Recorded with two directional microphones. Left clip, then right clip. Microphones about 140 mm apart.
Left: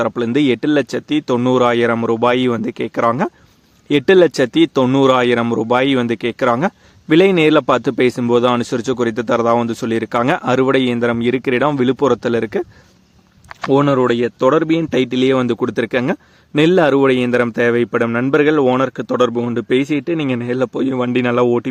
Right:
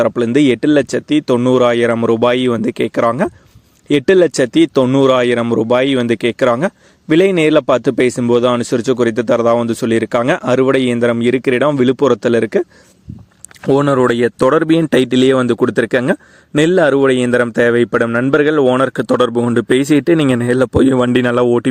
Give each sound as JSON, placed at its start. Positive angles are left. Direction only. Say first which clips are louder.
{"t": 0.3, "sound": "speech", "louder": "right 3 dB", "side_deg": -25}
{"t": 13.7, "sound": "a man's voice", "louder": "right 2 dB", "side_deg": -55}